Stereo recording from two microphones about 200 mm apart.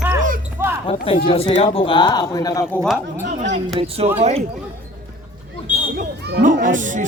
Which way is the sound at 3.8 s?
30° right (ahead or behind).